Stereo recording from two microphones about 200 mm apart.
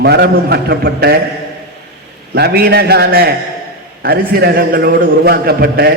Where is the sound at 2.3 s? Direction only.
50° right (ahead or behind).